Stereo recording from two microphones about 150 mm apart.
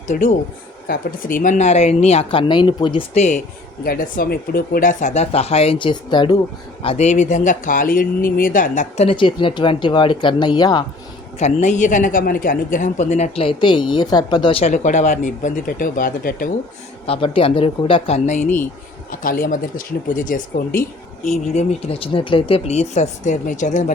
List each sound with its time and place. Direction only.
0.1 s a man's voice: 60° left (ahead or behind); by 3.0 s 35° left (ahead or behind)
3.2 s a man's voice: 55° left (ahead or behind)
3.8 s a man's voice: 70° left (ahead or behind); by 6.3 s 30° left (ahead or behind)
6.8 s speech: 50° left (ahead or behind)
9.0 s speech: 35° left (ahead or behind)
11.3 s a man's voice: 50° left (ahead or behind); by 14.6 s 30° left (ahead or behind)
14.6 s speech: 50° left (ahead or behind); by 16.5 s 70° left (ahead or behind)
17.1 s speech: 40° left (ahead or behind); by 18.6 s 55° left (ahead or behind)
19.2 s speech: 70° left (ahead or behind)
21.2 s a man's voice: 50° left (ahead or behind)